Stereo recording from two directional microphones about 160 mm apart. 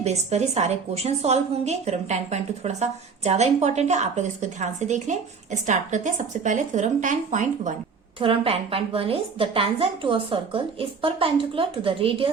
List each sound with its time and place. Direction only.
0.0 s a woman's voice: 45° right (ahead or behind)
8.2 s a woman's voice: 35° right (ahead or behind)